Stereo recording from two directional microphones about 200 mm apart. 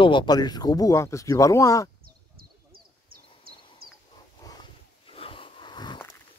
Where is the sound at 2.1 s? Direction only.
50° right (ahead or behind).